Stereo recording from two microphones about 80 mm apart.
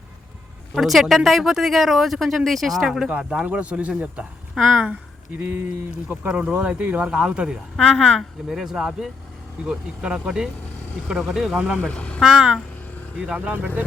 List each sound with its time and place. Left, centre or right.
0.8 s speech: centre
5.4 s speech: right
6.2 s speech: centre
7.8 s speech: centre
8.4 s speech: centre
11.8 s speech: centre
12.2 s speech: centre